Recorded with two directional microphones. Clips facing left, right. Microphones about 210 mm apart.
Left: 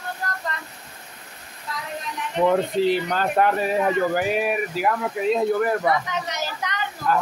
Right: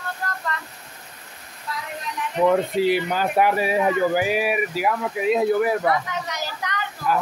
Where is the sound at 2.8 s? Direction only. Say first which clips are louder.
Even; 10° right (ahead or behind).